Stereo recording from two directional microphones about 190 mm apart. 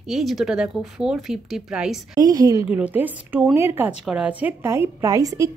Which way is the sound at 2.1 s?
20° right (ahead or behind).